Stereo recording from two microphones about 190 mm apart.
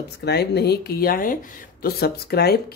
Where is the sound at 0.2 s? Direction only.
60° left (ahead or behind).